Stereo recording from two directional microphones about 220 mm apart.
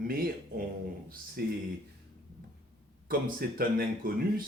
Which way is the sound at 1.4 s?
45° right (ahead or behind).